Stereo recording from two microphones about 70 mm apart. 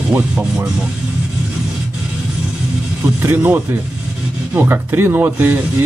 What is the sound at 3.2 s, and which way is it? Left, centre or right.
Speech, right.